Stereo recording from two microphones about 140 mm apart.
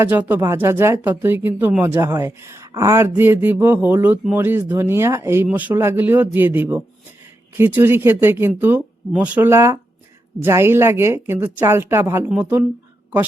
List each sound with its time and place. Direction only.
0.0 s speech: 15° right (ahead or behind)